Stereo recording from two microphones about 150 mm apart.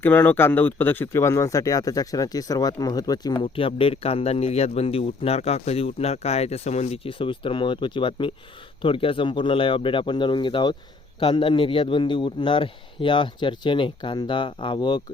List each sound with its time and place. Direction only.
0.0 s speech: 15° left (ahead or behind); by 15.0 s 30° left (ahead or behind)